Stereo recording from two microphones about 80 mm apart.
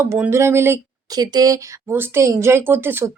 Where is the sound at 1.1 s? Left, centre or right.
Right.